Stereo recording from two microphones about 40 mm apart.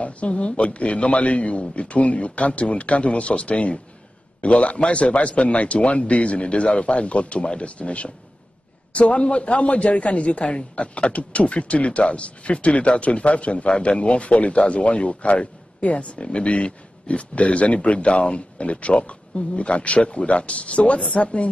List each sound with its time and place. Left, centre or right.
0.0 s a man's voice: left